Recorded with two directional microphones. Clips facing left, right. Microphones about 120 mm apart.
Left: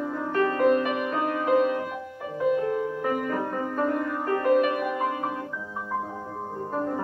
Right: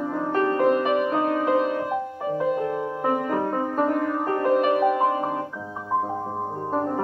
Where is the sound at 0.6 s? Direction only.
25° right (ahead or behind).